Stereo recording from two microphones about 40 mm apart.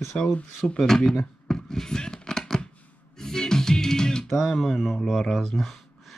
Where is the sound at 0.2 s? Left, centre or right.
Left.